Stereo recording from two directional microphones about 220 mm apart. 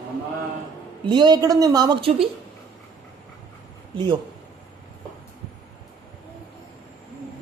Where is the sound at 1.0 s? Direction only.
20° right (ahead or behind).